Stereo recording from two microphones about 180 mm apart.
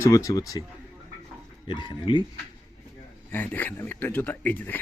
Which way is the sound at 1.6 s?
25° left (ahead or behind).